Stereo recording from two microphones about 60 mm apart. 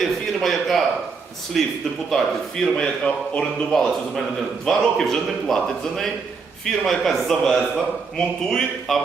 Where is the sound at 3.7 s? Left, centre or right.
Centre.